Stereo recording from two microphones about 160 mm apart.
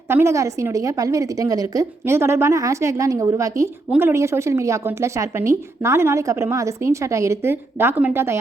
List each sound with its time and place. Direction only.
0.1 s a woman's voice: 15° right (ahead or behind)